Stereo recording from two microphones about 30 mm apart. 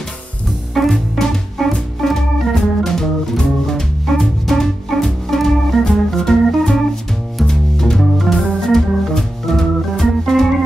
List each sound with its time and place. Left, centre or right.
0.7 s music: centre
2.0 s organ: centre
4.0 s music: centre
8.0 s organ: centre